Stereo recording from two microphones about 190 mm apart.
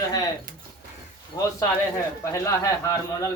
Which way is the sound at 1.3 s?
20° left (ahead or behind).